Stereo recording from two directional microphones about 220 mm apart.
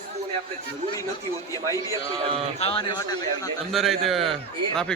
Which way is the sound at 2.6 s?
25° left (ahead or behind).